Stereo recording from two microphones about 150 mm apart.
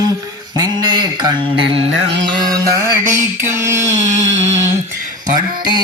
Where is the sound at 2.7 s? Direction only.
15° right (ahead or behind).